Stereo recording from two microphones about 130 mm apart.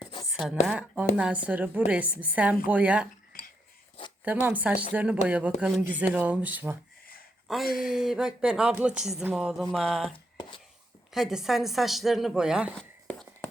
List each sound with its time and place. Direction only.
0.0 s a sound: 30° left (ahead or behind)
0.3 s a sound: 5° right (ahead or behind)
0.7 s a woman's voice: 10° right (ahead or behind)
4.2 s a woman's voice: 10° right (ahead or behind)
7.4 s a woman's voice: centre (ahead or behind)
11.1 s a woman's voice: 5° right (ahead or behind)
12.7 s whispering: 5° left (ahead or behind)